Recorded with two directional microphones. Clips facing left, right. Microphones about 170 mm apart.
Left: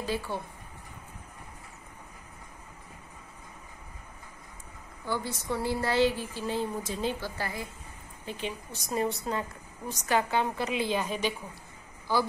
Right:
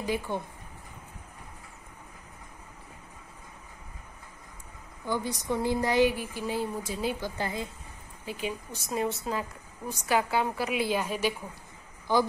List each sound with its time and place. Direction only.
0.0 s a woman's voice: 15° right (ahead or behind)
5.0 s a woman's voice: 15° right (ahead or behind)
8.3 s a woman's voice: 10° right (ahead or behind)